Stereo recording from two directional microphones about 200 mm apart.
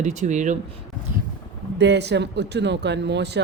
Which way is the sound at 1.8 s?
60° right (ahead or behind).